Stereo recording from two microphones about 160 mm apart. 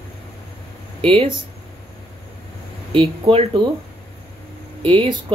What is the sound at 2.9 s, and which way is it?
Speech, 35° right (ahead or behind).